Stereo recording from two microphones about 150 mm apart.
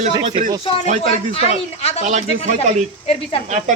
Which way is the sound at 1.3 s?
45° left (ahead or behind).